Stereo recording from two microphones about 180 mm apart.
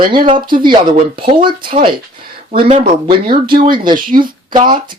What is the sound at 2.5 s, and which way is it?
Speech, 40° right (ahead or behind).